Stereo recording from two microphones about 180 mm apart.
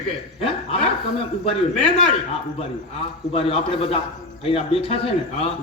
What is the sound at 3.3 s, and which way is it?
A man's voice, 30° left (ahead or behind).